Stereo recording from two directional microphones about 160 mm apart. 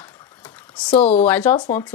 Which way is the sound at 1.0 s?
40° left (ahead or behind).